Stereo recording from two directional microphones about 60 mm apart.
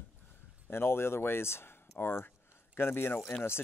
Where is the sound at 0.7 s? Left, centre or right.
Left.